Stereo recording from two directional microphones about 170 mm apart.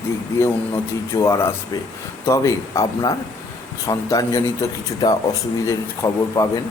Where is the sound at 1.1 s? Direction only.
15° left (ahead or behind).